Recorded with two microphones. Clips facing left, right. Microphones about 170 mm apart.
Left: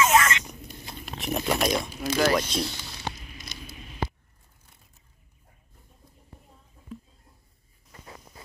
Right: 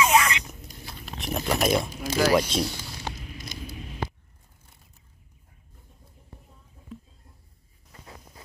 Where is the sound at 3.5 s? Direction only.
45° right (ahead or behind).